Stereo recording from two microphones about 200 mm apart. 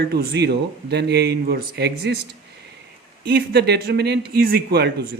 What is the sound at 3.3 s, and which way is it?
Speech, 55° right (ahead or behind).